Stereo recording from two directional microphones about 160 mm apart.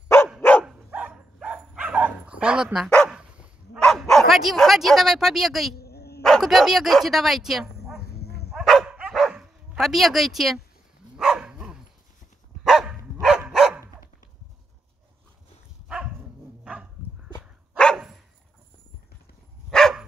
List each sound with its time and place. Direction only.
0.4 s dog: 10° left (ahead or behind)
0.7 s dog: 5° right (ahead or behind)
3.8 s speech: centre (ahead or behind)
5.8 s dog: 80° left
6.2 s speech: centre (ahead or behind)
8.2 s dog: 85° left
8.5 s bow-wow: centre (ahead or behind)
11.1 s dog: 5° right (ahead or behind)
16.6 s dog: 5° right (ahead or behind)
19.7 s dog: centre (ahead or behind)